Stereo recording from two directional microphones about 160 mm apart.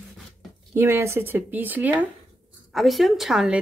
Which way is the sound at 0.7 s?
15° right (ahead or behind).